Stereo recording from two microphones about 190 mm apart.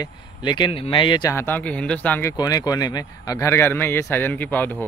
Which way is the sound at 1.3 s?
10° left (ahead or behind).